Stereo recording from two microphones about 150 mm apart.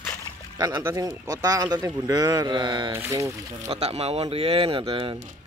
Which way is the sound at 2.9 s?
20° right (ahead or behind).